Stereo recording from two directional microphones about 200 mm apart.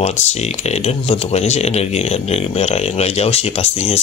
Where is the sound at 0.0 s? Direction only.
35° left (ahead or behind).